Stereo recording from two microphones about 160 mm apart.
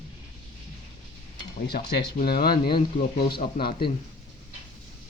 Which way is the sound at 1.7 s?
90° left.